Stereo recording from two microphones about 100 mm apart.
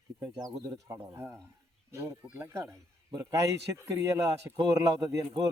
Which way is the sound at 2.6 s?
40° right (ahead or behind).